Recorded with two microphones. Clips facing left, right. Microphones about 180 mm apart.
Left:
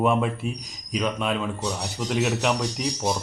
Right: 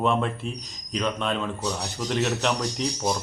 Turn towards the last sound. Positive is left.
turn(degrees=5)  # may be behind; listen again after turning